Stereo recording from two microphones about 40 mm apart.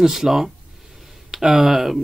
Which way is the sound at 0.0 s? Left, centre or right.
Centre.